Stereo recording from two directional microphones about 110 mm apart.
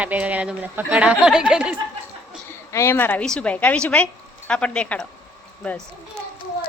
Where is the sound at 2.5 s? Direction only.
25° left (ahead or behind).